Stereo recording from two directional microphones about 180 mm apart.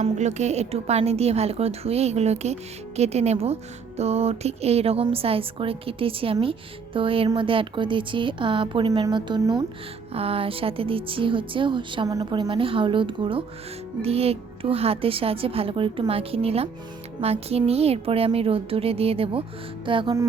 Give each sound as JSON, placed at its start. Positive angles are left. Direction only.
{"t": 0.0, "sound": "a woman's voice", "side_deg": -40}